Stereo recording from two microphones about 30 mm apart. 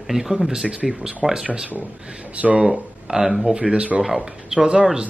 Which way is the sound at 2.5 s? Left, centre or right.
Right.